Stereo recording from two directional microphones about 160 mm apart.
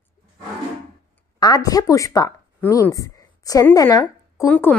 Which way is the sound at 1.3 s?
25° left (ahead or behind).